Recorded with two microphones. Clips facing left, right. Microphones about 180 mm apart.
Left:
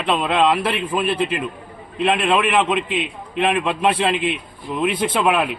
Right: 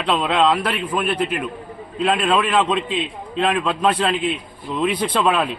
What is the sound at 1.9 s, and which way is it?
Speech, 10° left (ahead or behind).